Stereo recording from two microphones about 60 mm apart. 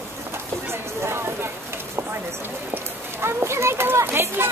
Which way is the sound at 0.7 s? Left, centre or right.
Right.